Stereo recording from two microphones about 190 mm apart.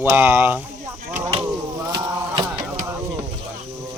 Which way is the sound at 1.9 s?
20° right (ahead or behind).